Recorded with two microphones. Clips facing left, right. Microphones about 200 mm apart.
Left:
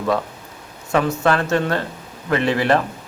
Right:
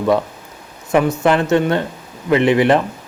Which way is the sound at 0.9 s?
15° right (ahead or behind).